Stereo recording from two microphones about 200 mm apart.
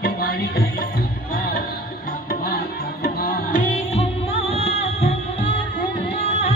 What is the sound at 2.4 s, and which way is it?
Music, 50° left (ahead or behind).